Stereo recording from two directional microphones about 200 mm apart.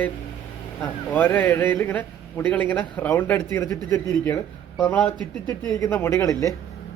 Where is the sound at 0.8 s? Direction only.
10° left (ahead or behind).